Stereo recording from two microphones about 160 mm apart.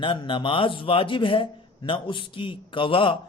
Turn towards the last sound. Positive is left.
turn(degrees=35)  # may be behind; listen again after turning